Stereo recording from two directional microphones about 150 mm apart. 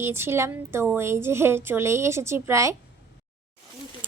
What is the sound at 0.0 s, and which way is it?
Speech, 15° right (ahead or behind).